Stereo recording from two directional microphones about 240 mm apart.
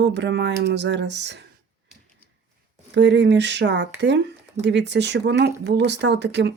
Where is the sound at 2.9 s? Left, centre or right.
Right.